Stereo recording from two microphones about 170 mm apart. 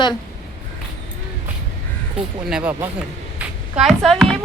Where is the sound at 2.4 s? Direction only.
5° right (ahead or behind).